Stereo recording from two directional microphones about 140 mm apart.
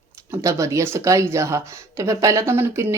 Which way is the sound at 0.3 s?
20° right (ahead or behind).